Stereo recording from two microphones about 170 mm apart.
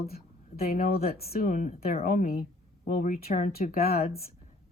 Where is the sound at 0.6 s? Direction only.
60° left (ahead or behind).